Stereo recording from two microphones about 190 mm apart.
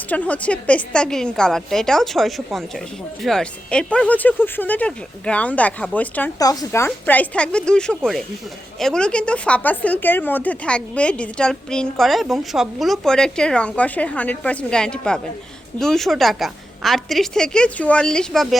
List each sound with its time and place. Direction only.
0.1 s a woman's voice: 10° left (ahead or behind)
6.4 s a woman's voice: 20° left (ahead or behind); by 18.4 s 5° left (ahead or behind)